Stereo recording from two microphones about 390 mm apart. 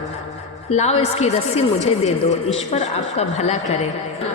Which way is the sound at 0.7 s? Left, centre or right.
Centre.